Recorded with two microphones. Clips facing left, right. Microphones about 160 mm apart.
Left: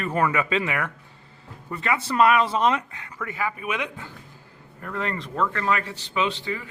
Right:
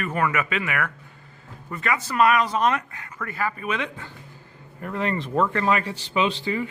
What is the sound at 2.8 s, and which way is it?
Speech, 15° left (ahead or behind).